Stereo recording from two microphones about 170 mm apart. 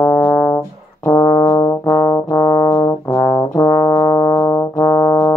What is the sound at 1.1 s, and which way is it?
Brass instrument, 20° left (ahead or behind).